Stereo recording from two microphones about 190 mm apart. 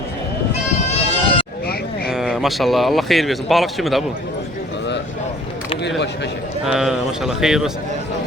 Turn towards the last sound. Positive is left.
turn(degrees=0)  # may be behind; listen again after turning